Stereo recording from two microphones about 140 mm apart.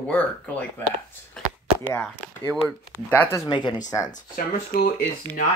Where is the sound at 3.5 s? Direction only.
35° left (ahead or behind).